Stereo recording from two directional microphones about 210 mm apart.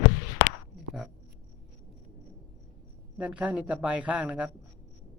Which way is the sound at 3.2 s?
5° right (ahead or behind).